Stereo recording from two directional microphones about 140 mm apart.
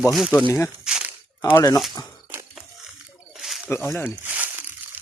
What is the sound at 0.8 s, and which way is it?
Crumpling, 5° right (ahead or behind).